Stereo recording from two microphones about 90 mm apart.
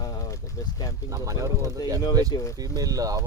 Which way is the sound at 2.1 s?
45° right (ahead or behind).